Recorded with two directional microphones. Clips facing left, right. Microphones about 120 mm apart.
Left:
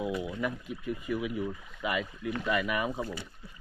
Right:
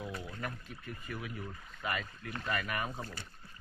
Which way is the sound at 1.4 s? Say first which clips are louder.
Left 9 dB; 90° left.